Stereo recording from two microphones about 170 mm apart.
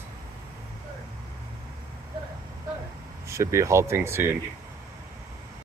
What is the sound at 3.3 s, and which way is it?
Speech, 15° right (ahead or behind).